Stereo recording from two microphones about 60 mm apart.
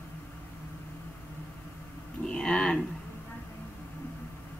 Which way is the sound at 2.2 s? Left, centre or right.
Centre.